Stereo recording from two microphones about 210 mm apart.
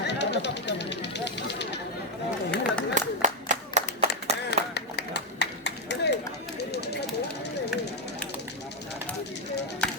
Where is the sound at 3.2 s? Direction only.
35° right (ahead or behind).